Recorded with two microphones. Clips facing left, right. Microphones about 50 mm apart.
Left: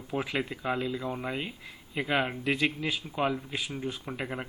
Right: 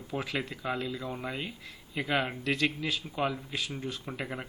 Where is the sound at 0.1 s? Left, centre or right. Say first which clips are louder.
Left 3 dB; centre.